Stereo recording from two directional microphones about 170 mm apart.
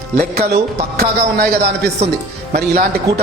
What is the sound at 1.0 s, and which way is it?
A man's voice, 70° right (ahead or behind).